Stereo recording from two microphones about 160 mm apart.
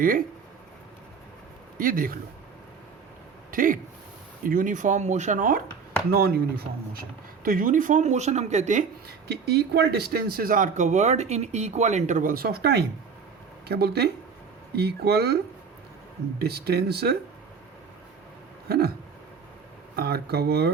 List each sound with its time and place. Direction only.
0.0 s speech: 60° right (ahead or behind)
1.8 s speech: 60° right (ahead or behind)
3.5 s speech: 60° right (ahead or behind)
6.1 s speech: 80° right
7.4 s speech: 60° right (ahead or behind)
9.5 s speech: 90° right
16.4 s speech: 80° right
20.0 s speech: 75° right (ahead or behind)